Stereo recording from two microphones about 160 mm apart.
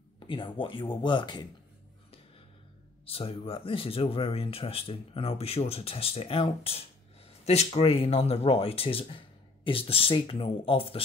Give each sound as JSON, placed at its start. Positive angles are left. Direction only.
{"t": 0.2, "sound": "speech", "side_deg": 30}
{"t": 3.1, "sound": "speech", "side_deg": 35}